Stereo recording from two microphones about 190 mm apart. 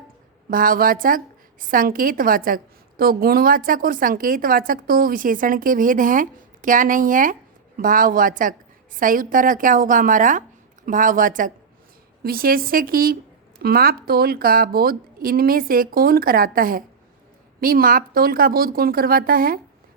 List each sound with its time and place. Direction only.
0.5 s a woman's voice: 50° right (ahead or behind)